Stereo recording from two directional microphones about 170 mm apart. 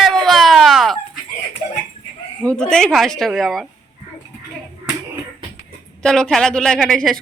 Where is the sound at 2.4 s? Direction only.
5° left (ahead or behind).